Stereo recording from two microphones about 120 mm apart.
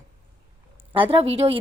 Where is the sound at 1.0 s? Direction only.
50° right (ahead or behind).